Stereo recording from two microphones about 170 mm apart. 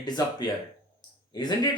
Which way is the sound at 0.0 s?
25° left (ahead or behind).